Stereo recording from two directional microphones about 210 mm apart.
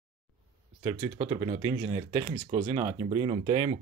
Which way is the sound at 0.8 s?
25° right (ahead or behind).